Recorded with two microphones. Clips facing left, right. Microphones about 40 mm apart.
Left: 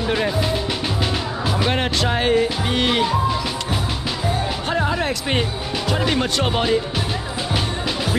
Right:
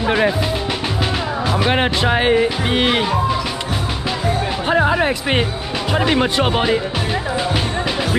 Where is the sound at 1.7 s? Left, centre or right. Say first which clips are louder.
Right 4 dB; right.